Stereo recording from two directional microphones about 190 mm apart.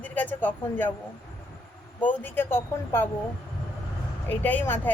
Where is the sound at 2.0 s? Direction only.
10° left (ahead or behind).